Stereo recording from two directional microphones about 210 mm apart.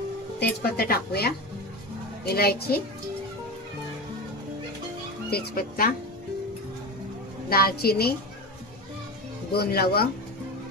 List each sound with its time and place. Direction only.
0.4 s a woman's voice: 45° left (ahead or behind)
5.3 s a woman's voice: 45° left (ahead or behind)
7.4 s a woman's voice: 45° left (ahead or behind)
9.5 s a woman's voice: 50° left (ahead or behind)